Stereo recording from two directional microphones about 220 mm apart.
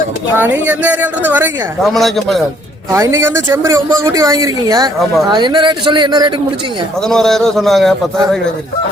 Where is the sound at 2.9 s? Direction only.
10° right (ahead or behind).